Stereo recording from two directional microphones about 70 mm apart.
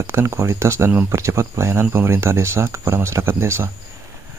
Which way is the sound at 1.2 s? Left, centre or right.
Right.